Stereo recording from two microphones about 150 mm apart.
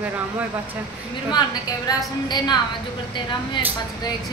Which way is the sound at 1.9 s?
25° left (ahead or behind).